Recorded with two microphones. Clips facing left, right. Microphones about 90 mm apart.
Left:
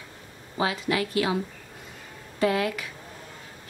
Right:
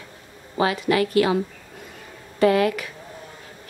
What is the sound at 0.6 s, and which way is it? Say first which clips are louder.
Speech: right 6 dB; 60° right (ahead or behind).